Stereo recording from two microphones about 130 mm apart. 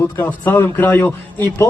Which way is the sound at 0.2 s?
15° left (ahead or behind).